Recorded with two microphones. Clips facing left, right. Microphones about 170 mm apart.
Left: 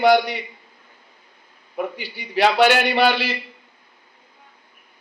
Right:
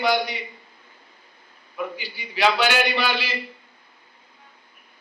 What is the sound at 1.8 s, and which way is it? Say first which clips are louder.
A man's voice: left 3 dB; 60° left (ahead or behind).